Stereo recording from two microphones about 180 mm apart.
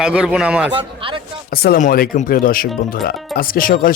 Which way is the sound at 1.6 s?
55° left (ahead or behind).